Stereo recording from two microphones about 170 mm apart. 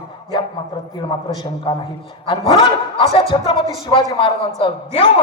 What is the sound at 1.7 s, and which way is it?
A man's voice, 30° left (ahead or behind).